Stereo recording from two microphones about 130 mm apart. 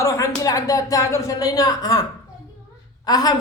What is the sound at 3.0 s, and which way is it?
Speech, 30° left (ahead or behind).